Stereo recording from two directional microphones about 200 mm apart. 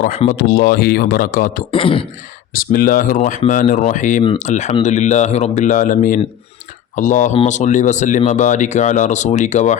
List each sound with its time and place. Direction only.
0.3 s speech: 45° left (ahead or behind)
1.7 s speech: 25° left (ahead or behind)
2.5 s speech: 45° left (ahead or behind)